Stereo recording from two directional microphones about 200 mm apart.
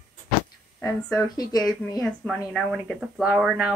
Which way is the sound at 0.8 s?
15° left (ahead or behind).